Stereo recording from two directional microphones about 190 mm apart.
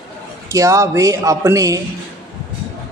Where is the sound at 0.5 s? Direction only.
15° right (ahead or behind).